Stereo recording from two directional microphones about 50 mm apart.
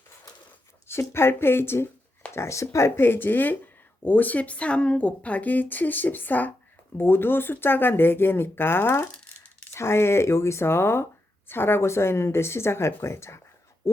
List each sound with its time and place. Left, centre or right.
0.9 s speech: left
2.3 s speech: left
3.0 s a woman's voice: left